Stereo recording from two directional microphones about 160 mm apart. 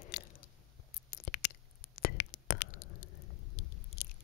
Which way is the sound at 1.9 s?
90° left.